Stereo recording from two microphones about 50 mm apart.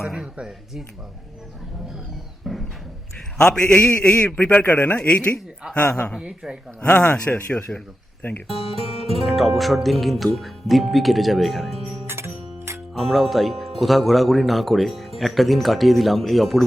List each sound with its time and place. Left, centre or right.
0.0 s speech: centre
2.4 s a sound: centre
3.3 s a man's voice: centre
4.6 s a man's voice: left
4.9 s speech: left
5.6 s a woman's voice: right
6.8 s speech: left
7.7 s a man's voice: centre
9.2 s speech: centre
12.0 s music: right
12.9 s speech: centre